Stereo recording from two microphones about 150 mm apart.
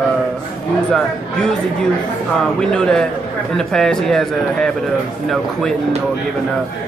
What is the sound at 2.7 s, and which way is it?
Speech, 5° left (ahead or behind).